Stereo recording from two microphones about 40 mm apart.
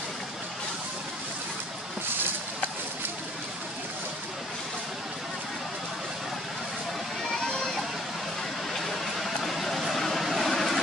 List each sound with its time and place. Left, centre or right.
7.4 s water: centre
8.7 s vehicle: centre